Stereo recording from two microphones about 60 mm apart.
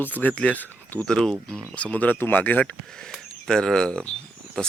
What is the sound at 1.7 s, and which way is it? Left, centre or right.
Speech, left.